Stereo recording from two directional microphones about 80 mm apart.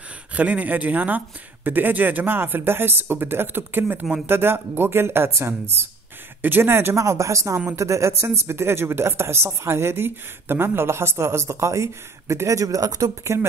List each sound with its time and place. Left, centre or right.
0.3 s speech: centre; by 13.5 s right